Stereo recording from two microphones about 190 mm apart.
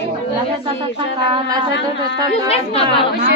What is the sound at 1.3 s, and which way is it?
Speech, 20° right (ahead or behind).